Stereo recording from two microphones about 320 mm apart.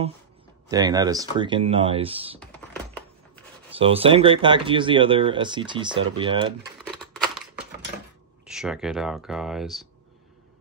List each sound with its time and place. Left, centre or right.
0.7 s speech: centre
3.7 s speech: centre
6.8 s crumpling: centre
8.5 s speech: centre